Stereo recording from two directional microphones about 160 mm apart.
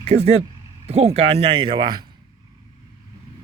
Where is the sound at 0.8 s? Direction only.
40° right (ahead or behind).